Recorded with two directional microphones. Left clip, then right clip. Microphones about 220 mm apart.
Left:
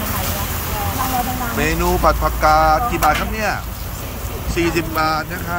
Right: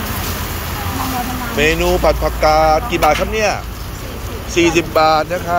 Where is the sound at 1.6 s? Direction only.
15° left (ahead or behind).